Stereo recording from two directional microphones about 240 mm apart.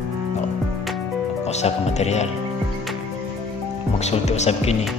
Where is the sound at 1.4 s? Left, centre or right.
Left.